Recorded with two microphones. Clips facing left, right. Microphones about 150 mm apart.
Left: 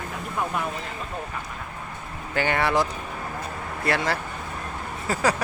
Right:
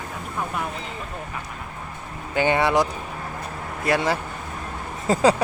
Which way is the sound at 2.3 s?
15° right (ahead or behind).